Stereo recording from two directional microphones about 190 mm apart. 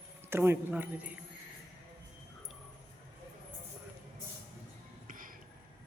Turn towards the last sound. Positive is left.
turn(degrees=-45)  # may be behind; listen again after turning